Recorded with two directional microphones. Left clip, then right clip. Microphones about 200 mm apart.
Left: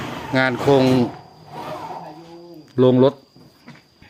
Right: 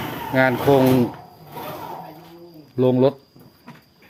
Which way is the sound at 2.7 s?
20° left (ahead or behind).